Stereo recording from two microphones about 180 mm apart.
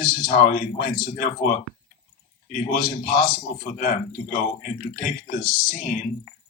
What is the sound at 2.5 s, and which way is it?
Speech, 50° left (ahead or behind).